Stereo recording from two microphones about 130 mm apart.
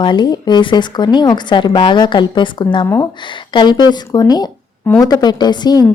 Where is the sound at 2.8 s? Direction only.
20° left (ahead or behind).